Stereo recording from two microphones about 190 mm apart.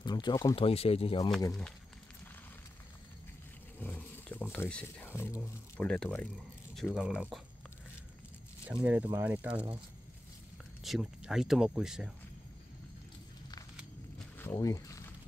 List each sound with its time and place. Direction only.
0.0 s speech: 25° left (ahead or behind)
0.7 s speech: 30° left (ahead or behind)
3.8 s speech: 10° left (ahead or behind)
8.8 s speech: 10° right (ahead or behind)
10.8 s speech: centre (ahead or behind)
14.4 s a sound: 15° left (ahead or behind)